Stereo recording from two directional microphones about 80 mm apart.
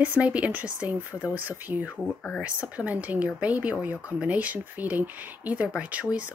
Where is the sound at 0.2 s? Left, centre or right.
Centre.